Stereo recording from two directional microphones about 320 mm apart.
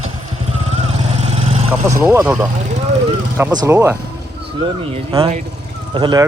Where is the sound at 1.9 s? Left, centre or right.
Centre.